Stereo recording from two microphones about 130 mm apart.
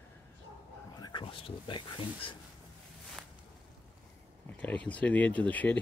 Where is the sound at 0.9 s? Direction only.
35° left (ahead or behind).